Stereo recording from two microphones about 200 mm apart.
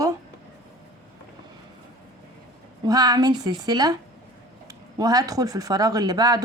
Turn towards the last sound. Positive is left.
turn(degrees=-20)  # may be behind; listen again after turning